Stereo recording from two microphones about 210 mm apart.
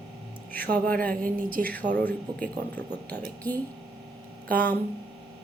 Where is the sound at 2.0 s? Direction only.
10° left (ahead or behind).